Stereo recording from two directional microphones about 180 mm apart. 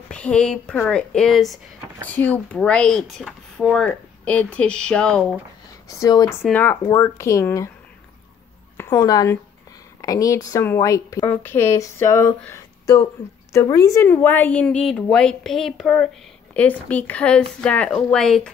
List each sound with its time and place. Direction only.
0.1 s speech: 5° left (ahead or behind)
5.9 s a woman's voice: 20° left (ahead or behind)
8.7 s a woman's voice: 20° left (ahead or behind)
12.4 s a sound: 15° left (ahead or behind)
13.5 s a woman's voice: 15° left (ahead or behind)